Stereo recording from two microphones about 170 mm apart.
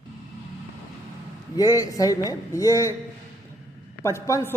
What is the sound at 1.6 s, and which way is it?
Speech, 20° left (ahead or behind).